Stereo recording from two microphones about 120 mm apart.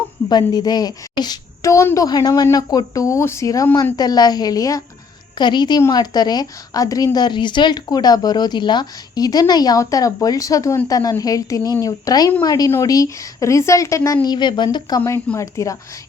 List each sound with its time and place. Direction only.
0.3 s a woman's voice: 35° left (ahead or behind)